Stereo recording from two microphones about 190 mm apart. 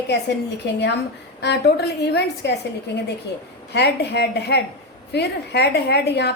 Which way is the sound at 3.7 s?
60° left (ahead or behind).